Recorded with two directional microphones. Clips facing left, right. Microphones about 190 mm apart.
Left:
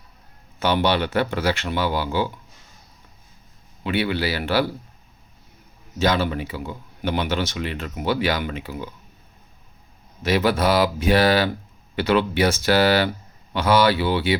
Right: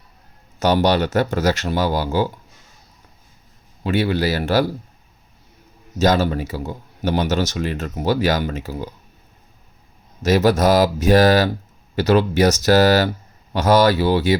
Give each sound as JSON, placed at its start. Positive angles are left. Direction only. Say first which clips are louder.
{"t": 0.6, "sound": "speech", "louder": "right 4 dB", "side_deg": -40}
{"t": 3.8, "sound": "speech", "louder": "right 4 dB", "side_deg": -40}
{"t": 6.0, "sound": "a man's voice", "louder": "right 4 dB", "side_deg": -40}
{"t": 10.2, "sound": "speech", "louder": "right 4 dB", "side_deg": -45}